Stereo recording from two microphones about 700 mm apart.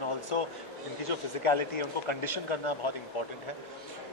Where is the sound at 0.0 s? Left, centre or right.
Left.